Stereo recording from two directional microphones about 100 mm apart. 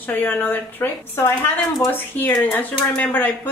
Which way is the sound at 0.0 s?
20° left (ahead or behind).